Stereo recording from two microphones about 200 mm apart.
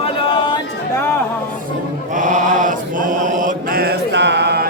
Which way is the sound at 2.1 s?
40° right (ahead or behind).